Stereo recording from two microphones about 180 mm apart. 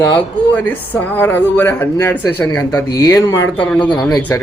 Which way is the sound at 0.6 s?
10° left (ahead or behind).